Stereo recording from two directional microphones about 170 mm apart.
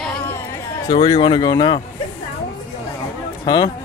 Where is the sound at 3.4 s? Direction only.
25° left (ahead or behind).